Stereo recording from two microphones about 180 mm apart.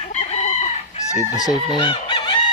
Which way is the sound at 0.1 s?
35° left (ahead or behind).